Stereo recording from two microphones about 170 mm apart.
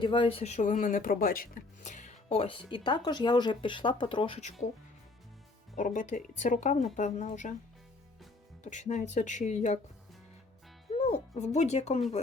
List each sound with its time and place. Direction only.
0.0 s speech: 30° left (ahead or behind)
5.7 s speech: 50° left (ahead or behind)
8.6 s speech: 45° left (ahead or behind)
10.9 s speech: 40° left (ahead or behind)